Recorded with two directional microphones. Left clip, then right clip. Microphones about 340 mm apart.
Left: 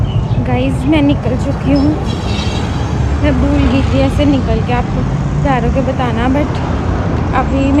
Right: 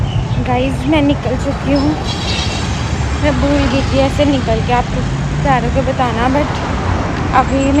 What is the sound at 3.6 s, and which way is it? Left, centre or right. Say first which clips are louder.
Speech: even; right.